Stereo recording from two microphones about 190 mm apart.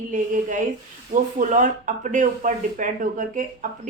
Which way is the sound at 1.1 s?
40° right (ahead or behind).